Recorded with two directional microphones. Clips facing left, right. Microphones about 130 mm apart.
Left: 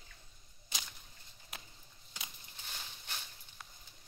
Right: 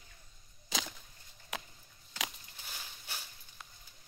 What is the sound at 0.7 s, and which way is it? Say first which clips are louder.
Chop: right 9 dB; 90° right.